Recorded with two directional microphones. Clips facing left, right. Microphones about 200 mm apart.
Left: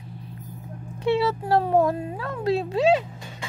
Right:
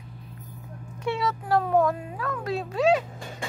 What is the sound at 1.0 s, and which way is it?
Speech, 30° left (ahead or behind).